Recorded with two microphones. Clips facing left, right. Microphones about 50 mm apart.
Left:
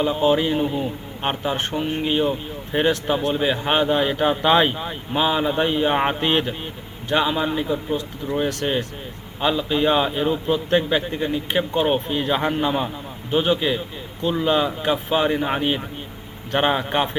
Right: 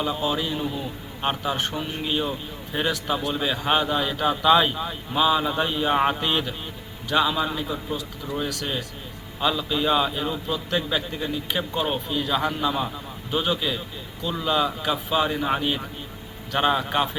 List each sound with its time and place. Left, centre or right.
0.2 s speech: left
1.2 s speech: centre